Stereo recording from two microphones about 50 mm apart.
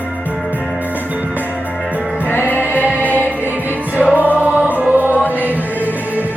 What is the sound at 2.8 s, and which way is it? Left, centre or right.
Music, right.